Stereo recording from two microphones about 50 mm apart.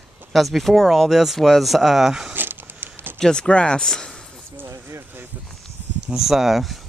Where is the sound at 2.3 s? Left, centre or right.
Right.